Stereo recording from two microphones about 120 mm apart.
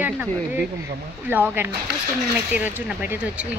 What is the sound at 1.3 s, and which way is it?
Speech, 15° right (ahead or behind).